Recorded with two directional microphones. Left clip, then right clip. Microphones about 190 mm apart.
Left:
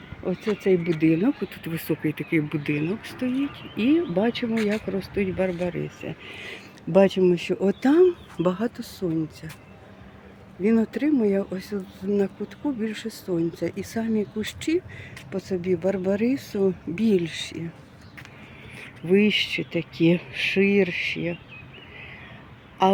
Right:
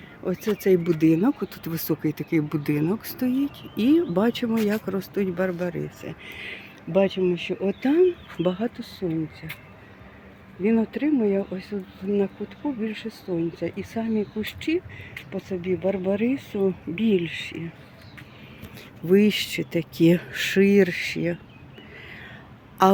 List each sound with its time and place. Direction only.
0.5 s speech: 10° right (ahead or behind)
0.9 s speech: 20° right (ahead or behind)
4.5 s speech: centre (ahead or behind)
10.6 s speech: centre (ahead or behind)
18.8 s speech: 15° right (ahead or behind)